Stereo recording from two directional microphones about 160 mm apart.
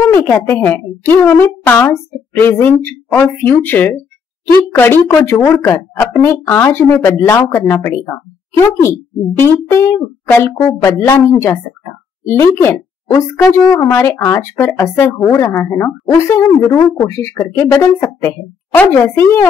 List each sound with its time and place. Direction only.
0.0 s a woman's voice: 15° left (ahead or behind)
9.4 s a woman's voice: 15° left (ahead or behind)